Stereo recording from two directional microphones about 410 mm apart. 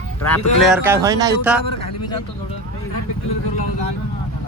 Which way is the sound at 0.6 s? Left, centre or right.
Centre.